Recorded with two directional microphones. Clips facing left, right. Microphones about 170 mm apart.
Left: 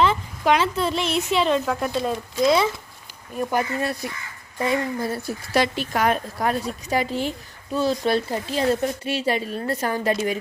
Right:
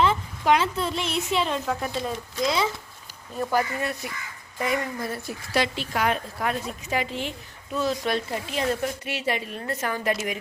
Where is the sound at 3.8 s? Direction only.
35° left (ahead or behind).